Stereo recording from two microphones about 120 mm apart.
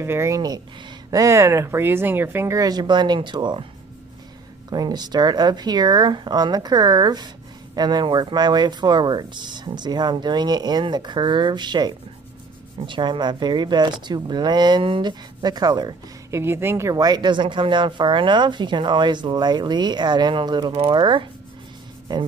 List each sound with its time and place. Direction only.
0.0 s speech: 20° right (ahead or behind); by 3.6 s 40° right (ahead or behind)
4.6 s speech: 35° right (ahead or behind)
16.3 s speech: 20° right (ahead or behind); by 21.3 s 40° right (ahead or behind)